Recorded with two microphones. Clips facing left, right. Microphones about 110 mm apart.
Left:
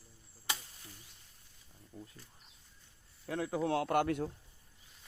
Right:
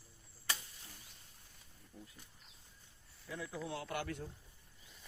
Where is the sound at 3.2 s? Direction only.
65° left (ahead or behind).